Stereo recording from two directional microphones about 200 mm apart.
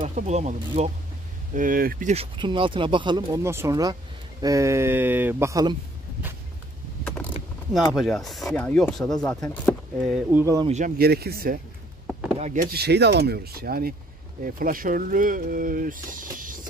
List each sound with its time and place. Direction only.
0.0 s speech: 35° right (ahead or behind)
2.3 s speech: 25° right (ahead or behind)
7.3 s keys jangling: 30° left (ahead or behind)
7.7 s speech: centre (ahead or behind)
10.3 s speech: 15° right (ahead or behind)
11.0 s speech: 50° right (ahead or behind)
12.4 s speech: 35° right (ahead or behind)
12.6 s speech: 55° right (ahead or behind)